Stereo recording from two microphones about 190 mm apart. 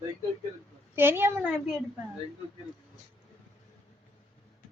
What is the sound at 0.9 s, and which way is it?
Speech, 10° right (ahead or behind).